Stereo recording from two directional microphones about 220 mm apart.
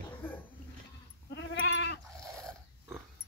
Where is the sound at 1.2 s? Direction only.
55° left (ahead or behind).